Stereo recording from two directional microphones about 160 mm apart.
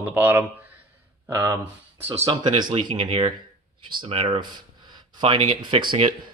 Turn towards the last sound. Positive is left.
turn(degrees=-35)  # may be behind; listen again after turning